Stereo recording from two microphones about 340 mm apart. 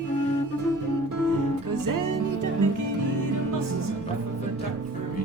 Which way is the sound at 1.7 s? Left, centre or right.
Right.